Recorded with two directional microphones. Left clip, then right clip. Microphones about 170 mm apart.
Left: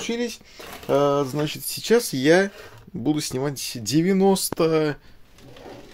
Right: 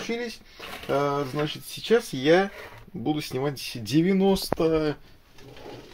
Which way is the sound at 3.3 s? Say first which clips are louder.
Left 2 dB; 20° left (ahead or behind).